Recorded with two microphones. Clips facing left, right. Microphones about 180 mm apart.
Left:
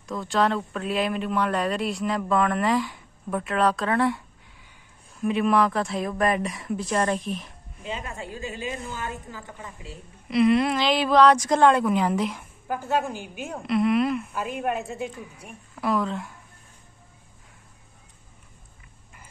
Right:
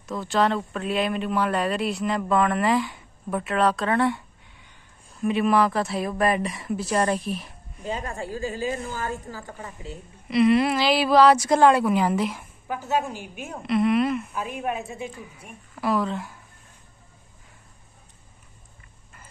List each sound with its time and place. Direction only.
0.1 s speech: centre (ahead or behind)
5.2 s speech: centre (ahead or behind)
7.8 s a woman's voice: 45° right (ahead or behind)
10.2 s speech: centre (ahead or behind)